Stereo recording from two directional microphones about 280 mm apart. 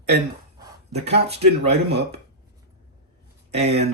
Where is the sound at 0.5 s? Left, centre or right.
Centre.